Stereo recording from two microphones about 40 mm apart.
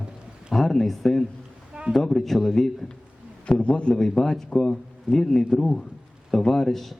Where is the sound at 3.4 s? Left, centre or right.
Left.